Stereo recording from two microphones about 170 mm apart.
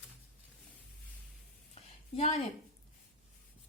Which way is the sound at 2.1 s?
40° left (ahead or behind).